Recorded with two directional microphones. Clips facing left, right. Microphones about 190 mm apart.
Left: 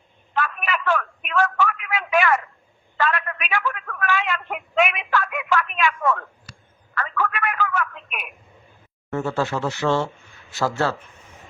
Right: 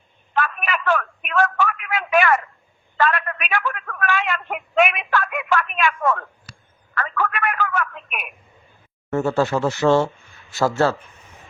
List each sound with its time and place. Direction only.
0.3 s a sound: 55° right (ahead or behind)
6.9 s telephone: 55° right (ahead or behind)
9.0 s speech: 45° right (ahead or behind)